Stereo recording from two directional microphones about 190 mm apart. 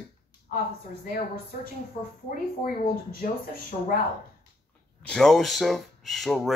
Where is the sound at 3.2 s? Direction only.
50° left (ahead or behind).